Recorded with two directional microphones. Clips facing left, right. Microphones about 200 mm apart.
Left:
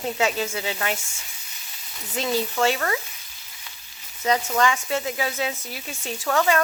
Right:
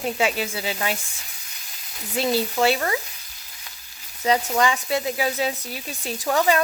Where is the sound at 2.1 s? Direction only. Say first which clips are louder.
Right 2 dB; 15° right (ahead or behind).